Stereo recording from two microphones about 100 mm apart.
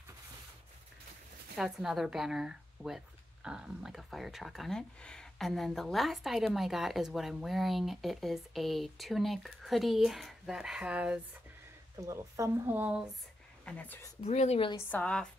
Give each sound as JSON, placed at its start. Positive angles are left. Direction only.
{"t": 1.6, "sound": "speech", "side_deg": -5}
{"t": 12.0, "sound": "speech", "side_deg": -30}
{"t": 12.6, "sound": "speech", "side_deg": -15}
{"t": 13.7, "sound": "a woman's voice", "side_deg": 15}
{"t": 14.2, "sound": "speech", "side_deg": 90}
{"t": 14.8, "sound": "a woman's voice", "side_deg": 15}